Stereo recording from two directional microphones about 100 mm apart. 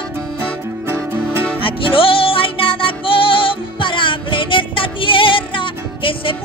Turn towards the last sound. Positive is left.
turn(degrees=60)  # may be behind; listen again after turning